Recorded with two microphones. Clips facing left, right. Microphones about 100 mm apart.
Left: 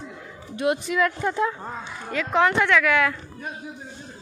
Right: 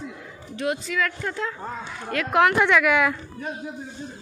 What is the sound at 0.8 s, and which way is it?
Speech, 20° left (ahead or behind).